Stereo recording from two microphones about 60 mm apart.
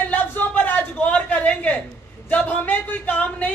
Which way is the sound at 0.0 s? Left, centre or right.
Left.